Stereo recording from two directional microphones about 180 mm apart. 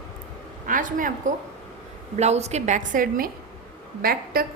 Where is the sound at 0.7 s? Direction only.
50° right (ahead or behind).